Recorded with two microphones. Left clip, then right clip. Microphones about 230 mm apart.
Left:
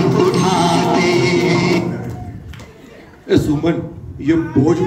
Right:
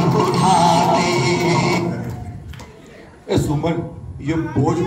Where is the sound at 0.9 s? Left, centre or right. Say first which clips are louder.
Left 3 dB; left.